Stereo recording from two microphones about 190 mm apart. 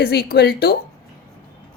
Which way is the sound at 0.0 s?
55° left (ahead or behind).